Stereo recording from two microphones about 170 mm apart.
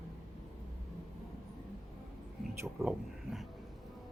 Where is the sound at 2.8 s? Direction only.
15° right (ahead or behind).